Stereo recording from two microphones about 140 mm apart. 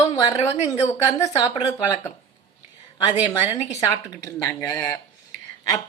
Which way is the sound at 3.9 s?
25° left (ahead or behind).